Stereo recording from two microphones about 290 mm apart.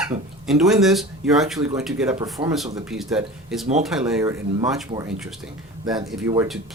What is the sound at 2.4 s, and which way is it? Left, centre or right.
Speech, centre.